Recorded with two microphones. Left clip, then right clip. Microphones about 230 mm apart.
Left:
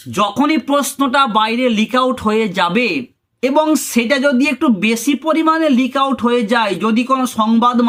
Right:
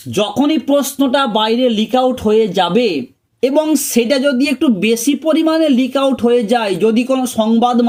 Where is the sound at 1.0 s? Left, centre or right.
Left.